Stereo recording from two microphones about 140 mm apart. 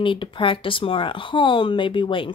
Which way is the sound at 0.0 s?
35° left (ahead or behind).